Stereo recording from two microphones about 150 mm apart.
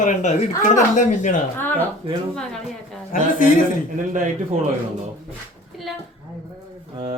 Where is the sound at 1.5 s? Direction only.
15° left (ahead or behind).